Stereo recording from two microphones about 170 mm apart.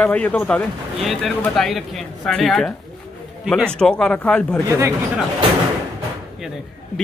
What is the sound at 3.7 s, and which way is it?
Speech, 5° left (ahead or behind).